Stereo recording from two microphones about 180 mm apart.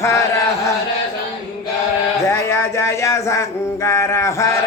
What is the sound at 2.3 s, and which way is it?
Speech, 15° left (ahead or behind).